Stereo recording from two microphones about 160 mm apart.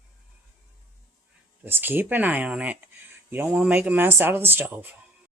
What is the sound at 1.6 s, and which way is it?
Speech, 10° right (ahead or behind).